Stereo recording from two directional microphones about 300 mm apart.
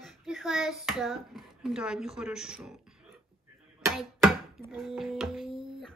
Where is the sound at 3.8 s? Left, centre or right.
Centre.